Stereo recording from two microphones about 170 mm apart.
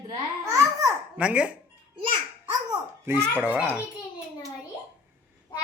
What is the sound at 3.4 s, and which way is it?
Speech, 10° right (ahead or behind).